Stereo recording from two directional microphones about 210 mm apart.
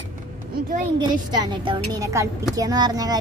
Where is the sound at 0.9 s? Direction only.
20° right (ahead or behind).